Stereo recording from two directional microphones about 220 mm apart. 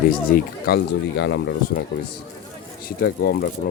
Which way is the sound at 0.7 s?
40° left (ahead or behind).